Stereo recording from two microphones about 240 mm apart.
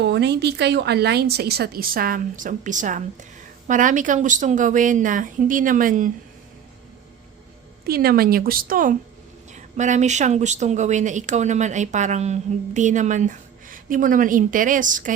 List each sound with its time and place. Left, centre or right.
0.0 s speech: right
7.9 s speech: right